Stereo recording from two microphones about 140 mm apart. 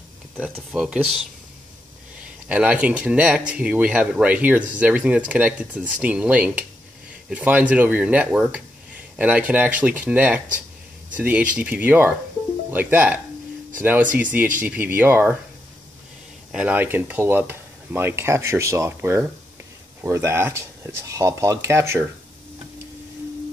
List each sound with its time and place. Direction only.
0.6 s speech: centre (ahead or behind)
2.4 s speech: 10° right (ahead or behind)
16.5 s speech: 10° right (ahead or behind)